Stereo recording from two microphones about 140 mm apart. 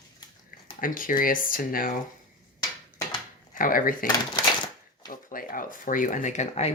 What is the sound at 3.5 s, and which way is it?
Speech, 85° left.